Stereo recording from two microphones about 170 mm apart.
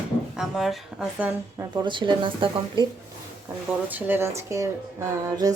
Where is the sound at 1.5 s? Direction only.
25° right (ahead or behind).